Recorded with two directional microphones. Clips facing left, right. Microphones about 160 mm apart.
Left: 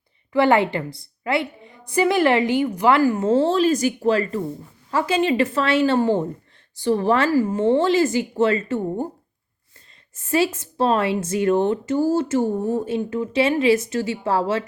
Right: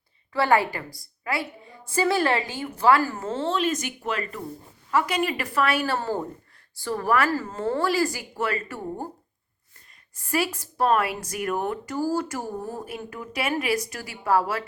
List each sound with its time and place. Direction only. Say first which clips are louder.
0.3 s a woman's voice: left 5 dB; 20° left (ahead or behind)
3.2 s a woman's voice: left 9 dB; 35° left (ahead or behind)
7.3 s speech: left 8 dB; 10° left (ahead or behind)
7.6 s a woman's voice: left 5 dB; 25° left (ahead or behind)
10.2 s a woman's voice: left 6 dB; 25° left (ahead or behind)